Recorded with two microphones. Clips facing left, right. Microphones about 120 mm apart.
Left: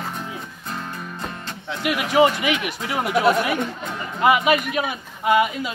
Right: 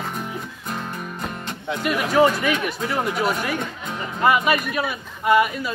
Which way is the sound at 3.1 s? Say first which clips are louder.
Left 8 dB; 65° left (ahead or behind).